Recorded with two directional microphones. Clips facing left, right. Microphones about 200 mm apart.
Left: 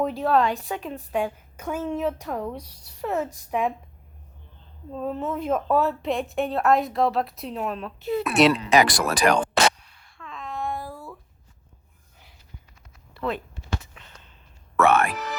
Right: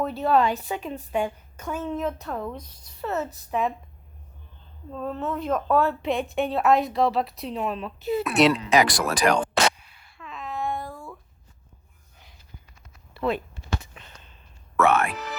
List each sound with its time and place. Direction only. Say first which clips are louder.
0.0 s a woman's voice: left 2 dB; 15° left (ahead or behind)
0.3 s a woman's voice: right 2 dB; centre (ahead or behind)
4.9 s speech: left 1 dB; 5° left (ahead or behind)
8.4 s speech: left 1 dB; 60° left (ahead or behind)
9.7 s a sound: even; 5° right (ahead or behind)
13.1 s speech: right 3 dB; 10° right (ahead or behind)
13.8 s a sound: right 2 dB; 20° right (ahead or behind)
14.8 s music: left 1 dB; 50° left (ahead or behind)